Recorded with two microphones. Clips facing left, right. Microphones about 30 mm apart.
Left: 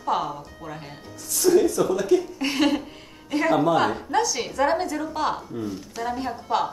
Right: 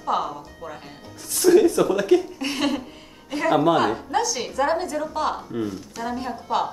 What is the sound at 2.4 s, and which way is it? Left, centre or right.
Speech, centre.